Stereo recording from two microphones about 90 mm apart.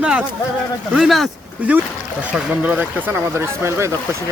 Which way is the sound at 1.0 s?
Centre (ahead or behind).